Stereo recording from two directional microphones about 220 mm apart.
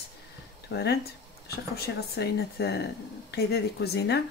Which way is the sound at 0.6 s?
50° left (ahead or behind).